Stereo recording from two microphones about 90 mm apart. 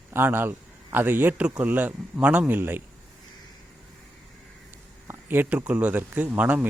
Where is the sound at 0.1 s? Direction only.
25° right (ahead or behind).